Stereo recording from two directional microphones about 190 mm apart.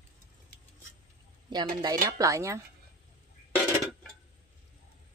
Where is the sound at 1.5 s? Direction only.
25° right (ahead or behind).